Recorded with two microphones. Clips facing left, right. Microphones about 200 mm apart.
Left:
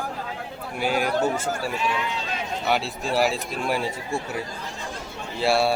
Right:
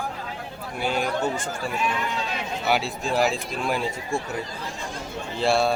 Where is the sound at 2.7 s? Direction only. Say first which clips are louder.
Right 1 dB; centre (ahead or behind).